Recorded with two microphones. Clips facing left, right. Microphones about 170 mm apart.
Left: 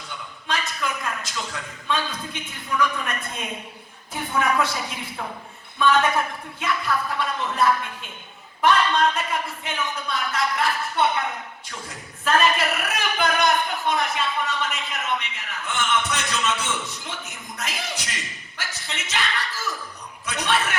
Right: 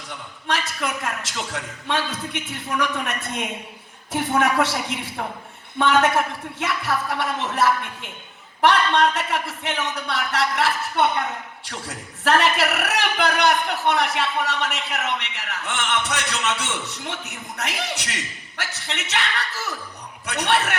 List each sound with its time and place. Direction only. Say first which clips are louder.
0.4 s a man's voice: right 2 dB; 75° right (ahead or behind)